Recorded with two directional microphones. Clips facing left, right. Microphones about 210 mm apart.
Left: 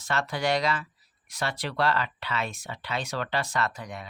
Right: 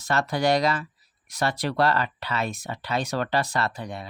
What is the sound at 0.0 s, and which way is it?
Speech, 40° right (ahead or behind).